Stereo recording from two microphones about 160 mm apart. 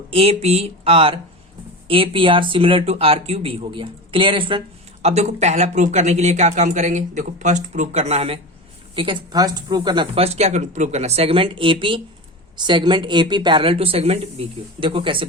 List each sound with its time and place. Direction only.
0.1 s speech: 40° right (ahead or behind)
5.0 s speech: 45° right (ahead or behind)
9.0 s speech: 30° right (ahead or behind)